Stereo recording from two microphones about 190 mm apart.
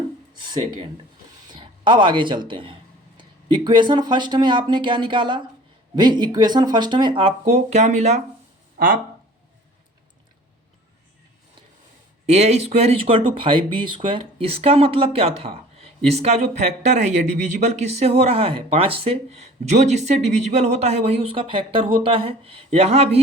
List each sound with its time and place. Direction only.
1.5 s speech: 25° right (ahead or behind)
12.2 s speech: 35° right (ahead or behind)